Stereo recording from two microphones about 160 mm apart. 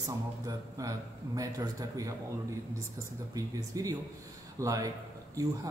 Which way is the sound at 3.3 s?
20° right (ahead or behind).